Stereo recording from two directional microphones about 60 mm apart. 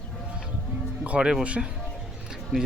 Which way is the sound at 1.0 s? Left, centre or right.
Centre.